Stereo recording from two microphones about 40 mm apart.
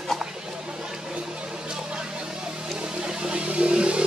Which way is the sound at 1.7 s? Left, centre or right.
Right.